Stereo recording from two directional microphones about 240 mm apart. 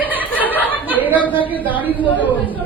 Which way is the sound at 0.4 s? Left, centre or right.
Centre.